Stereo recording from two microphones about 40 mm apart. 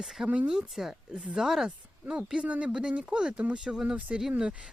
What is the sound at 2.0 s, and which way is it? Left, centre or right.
Speech, right.